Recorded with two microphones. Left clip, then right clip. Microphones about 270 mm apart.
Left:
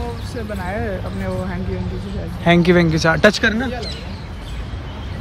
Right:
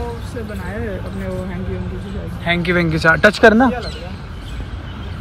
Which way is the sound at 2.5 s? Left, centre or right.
Centre.